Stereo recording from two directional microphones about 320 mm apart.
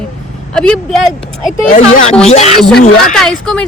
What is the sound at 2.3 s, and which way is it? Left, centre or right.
Speech, left.